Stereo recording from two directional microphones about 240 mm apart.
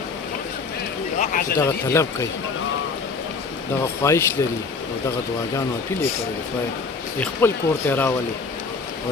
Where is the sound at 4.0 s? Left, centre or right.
Centre.